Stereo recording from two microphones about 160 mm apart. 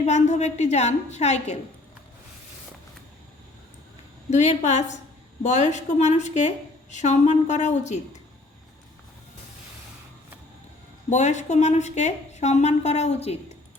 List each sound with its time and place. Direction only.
0.0 s a woman's voice: 45° left (ahead or behind)
4.3 s a woman's voice: 45° left (ahead or behind)
11.1 s a woman's voice: 45° left (ahead or behind)